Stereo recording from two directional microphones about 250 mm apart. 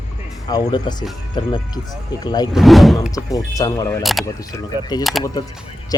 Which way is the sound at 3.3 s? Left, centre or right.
Centre.